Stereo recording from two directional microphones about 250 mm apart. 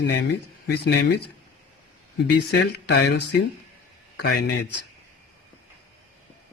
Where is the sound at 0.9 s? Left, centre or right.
Left.